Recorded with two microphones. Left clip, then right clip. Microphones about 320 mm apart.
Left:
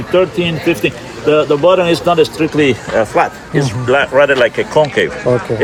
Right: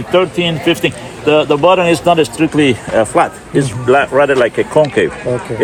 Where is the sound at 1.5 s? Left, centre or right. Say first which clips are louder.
Even; right.